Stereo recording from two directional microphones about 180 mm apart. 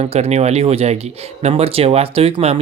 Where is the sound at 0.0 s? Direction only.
35° right (ahead or behind).